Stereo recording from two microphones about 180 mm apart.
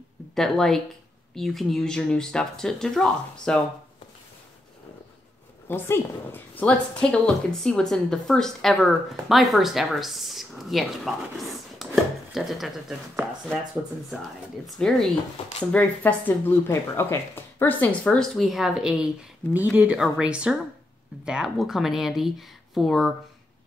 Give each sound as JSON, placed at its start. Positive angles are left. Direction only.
{"t": 0.3, "sound": "speech", "side_deg": 5}
{"t": 5.7, "sound": "speech", "side_deg": 10}
{"t": 11.8, "sound": "chopping", "side_deg": 0}
{"t": 14.2, "sound": "speech", "side_deg": 0}